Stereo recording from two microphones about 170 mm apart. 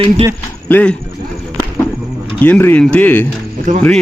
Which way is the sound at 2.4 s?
10° left (ahead or behind).